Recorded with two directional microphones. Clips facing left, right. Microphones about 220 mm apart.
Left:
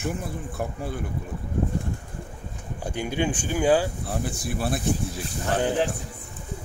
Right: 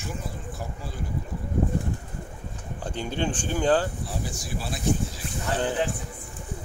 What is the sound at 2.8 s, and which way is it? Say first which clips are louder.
Speech: left 3 dB; 10° left (ahead or behind).